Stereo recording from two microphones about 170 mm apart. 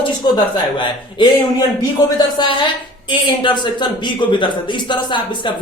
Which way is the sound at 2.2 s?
25° left (ahead or behind).